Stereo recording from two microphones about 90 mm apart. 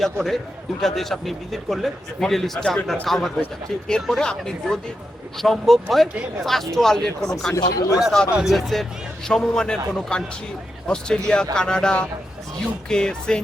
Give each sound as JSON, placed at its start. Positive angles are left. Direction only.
{"t": 0.0, "sound": "a man's voice", "side_deg": 0}
{"t": 7.6, "sound": "speech", "side_deg": 45}
{"t": 7.9, "sound": "a man's voice", "side_deg": 0}